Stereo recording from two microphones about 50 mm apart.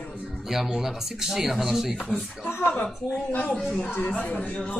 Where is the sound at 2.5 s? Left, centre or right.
Left.